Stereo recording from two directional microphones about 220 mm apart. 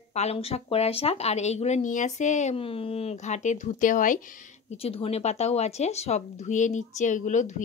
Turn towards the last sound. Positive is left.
turn(degrees=35)  # may be behind; listen again after turning